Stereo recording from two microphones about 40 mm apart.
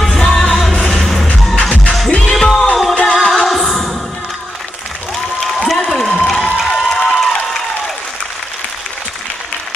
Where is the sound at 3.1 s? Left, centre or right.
Centre.